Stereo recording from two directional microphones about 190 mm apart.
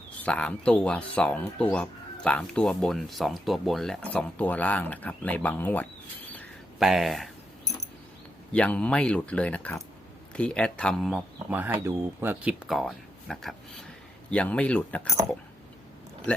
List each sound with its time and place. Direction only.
0.3 s speech: 5° left (ahead or behind)
6.7 s speech: centre (ahead or behind)
8.5 s speech: 5° left (ahead or behind)
11.5 s speech: 10° right (ahead or behind); by 15.1 s 5° left (ahead or behind)